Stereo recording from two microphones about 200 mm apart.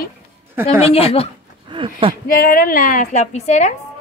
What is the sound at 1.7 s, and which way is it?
Speech, 25° right (ahead or behind).